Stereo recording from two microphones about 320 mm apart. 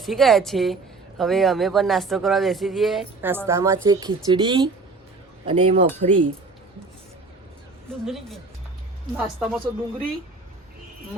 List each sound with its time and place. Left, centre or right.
0.0 s speech: centre
8.0 s speech: centre